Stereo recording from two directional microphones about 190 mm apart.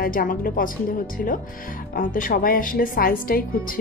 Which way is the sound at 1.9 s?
45° left (ahead or behind).